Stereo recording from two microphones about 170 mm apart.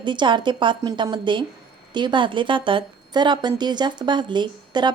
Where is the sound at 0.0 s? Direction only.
25° right (ahead or behind).